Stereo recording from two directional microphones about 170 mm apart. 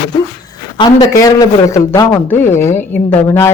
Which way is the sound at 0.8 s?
20° left (ahead or behind).